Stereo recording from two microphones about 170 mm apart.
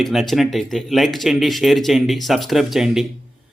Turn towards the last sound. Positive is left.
turn(degrees=0)  # may be behind; listen again after turning